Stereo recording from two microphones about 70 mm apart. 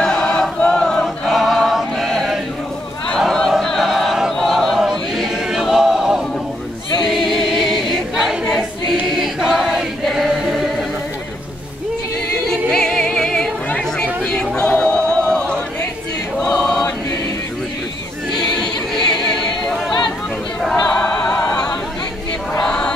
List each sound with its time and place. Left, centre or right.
0.0 s choir: centre
1.0 s choir: centre
3.2 s a sound: centre
7.1 s choir: centre
12.4 s music: centre
13.7 s a sound: centre
16.4 s choir: centre
18.3 s choir: centre
20.6 s music: centre
21.0 s music: left
22.6 s chant: centre